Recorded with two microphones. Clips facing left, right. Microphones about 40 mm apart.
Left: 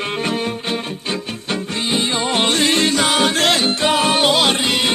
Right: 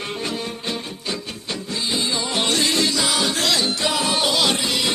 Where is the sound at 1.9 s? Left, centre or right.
Left.